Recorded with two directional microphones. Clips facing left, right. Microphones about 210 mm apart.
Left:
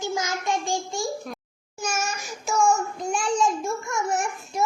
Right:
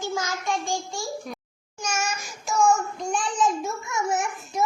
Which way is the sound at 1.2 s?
5° left (ahead or behind).